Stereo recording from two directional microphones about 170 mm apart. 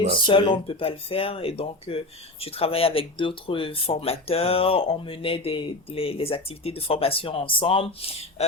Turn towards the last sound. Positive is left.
turn(degrees=30)  # may be behind; listen again after turning